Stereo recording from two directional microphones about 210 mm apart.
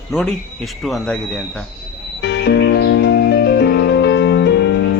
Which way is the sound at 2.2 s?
55° left (ahead or behind).